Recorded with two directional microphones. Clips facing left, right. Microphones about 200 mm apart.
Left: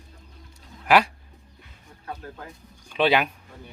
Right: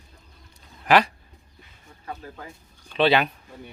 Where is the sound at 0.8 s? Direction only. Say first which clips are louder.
Even; 10° left (ahead or behind).